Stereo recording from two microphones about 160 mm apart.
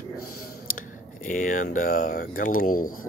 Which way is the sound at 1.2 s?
55° left (ahead or behind).